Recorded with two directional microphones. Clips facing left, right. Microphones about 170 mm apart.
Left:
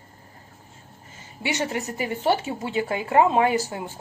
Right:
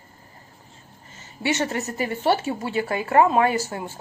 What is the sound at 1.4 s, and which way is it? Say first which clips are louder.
Speech: right 2 dB; 15° left (ahead or behind).